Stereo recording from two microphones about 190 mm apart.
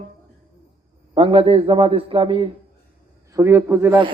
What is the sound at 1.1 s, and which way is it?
A man's voice, 30° right (ahead or behind).